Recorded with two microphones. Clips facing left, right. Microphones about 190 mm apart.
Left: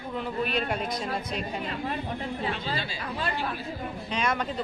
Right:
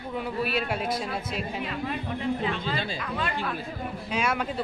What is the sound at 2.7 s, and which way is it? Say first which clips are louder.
Speech: right 3 dB; 50° right (ahead or behind).